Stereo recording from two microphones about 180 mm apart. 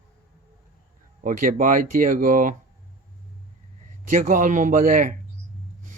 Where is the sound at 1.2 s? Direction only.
50° right (ahead or behind).